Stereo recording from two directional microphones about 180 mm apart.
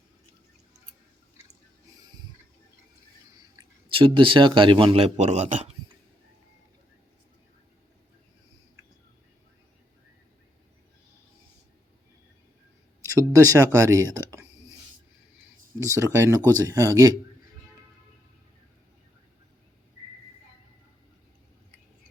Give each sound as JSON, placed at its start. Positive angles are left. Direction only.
{"t": 3.5, "sound": "speech", "side_deg": -25}
{"t": 13.1, "sound": "speech", "side_deg": -15}
{"t": 15.8, "sound": "speech", "side_deg": -15}